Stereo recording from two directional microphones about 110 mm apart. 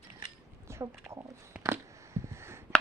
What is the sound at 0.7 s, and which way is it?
Speech, 25° right (ahead or behind).